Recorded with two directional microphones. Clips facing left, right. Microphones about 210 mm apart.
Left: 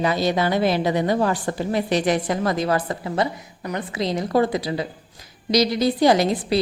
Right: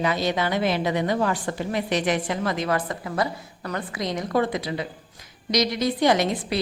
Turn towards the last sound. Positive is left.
turn(degrees=35)  # may be behind; listen again after turning